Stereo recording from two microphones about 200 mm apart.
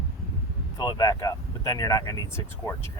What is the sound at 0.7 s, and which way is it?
Speech, 15° left (ahead or behind).